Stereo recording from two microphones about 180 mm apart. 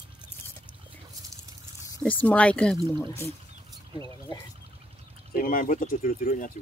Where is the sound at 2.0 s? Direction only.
10° left (ahead or behind).